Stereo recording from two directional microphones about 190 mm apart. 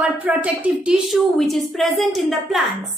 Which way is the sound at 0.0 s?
5° right (ahead or behind).